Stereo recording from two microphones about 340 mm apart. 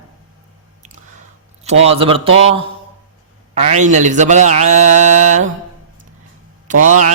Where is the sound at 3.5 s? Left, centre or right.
Right.